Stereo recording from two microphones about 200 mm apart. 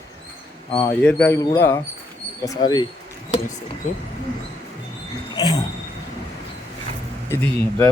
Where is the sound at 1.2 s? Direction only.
15° left (ahead or behind).